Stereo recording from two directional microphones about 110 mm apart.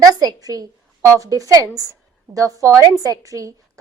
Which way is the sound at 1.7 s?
30° right (ahead or behind).